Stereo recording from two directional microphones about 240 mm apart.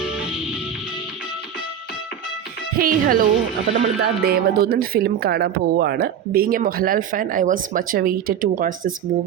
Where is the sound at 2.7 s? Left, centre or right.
Right.